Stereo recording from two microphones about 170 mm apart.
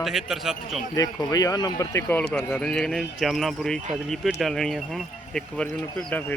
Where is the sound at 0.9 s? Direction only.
20° left (ahead or behind).